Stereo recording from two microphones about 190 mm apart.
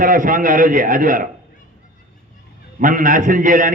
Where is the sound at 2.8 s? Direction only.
45° right (ahead or behind).